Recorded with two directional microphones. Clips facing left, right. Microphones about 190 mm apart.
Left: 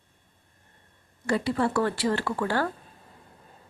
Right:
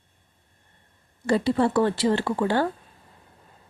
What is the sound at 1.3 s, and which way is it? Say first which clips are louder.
A woman's voice: right 4 dB; 30° right (ahead or behind).